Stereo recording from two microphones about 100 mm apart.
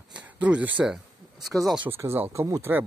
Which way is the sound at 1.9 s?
25° right (ahead or behind).